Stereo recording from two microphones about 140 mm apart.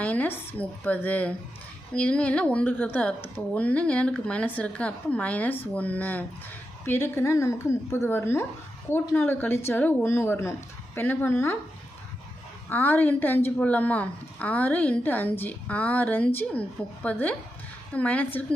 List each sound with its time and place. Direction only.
0.0 s a woman's voice: 10° left (ahead or behind)
12.6 s a woman's voice: 15° left (ahead or behind)